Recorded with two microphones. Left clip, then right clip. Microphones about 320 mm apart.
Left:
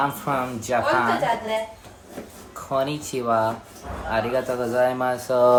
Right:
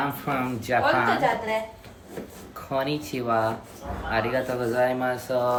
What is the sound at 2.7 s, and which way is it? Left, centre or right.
Speech, centre.